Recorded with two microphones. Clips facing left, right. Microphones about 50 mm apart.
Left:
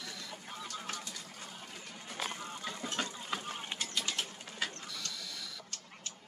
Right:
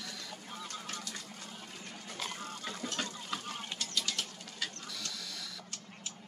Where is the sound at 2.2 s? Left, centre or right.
Left.